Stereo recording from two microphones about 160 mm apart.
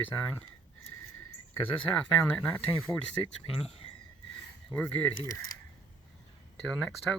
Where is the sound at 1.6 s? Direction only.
5° left (ahead or behind).